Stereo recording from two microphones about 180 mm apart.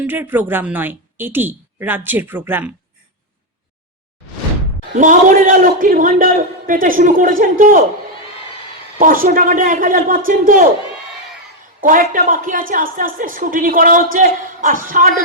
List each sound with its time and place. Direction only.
0.0 s a woman's voice: 10° right (ahead or behind)
4.9 s a woman's voice: 50° right (ahead or behind)
9.0 s a woman's voice: 50° right (ahead or behind)
11.8 s a woman's voice: 50° right (ahead or behind)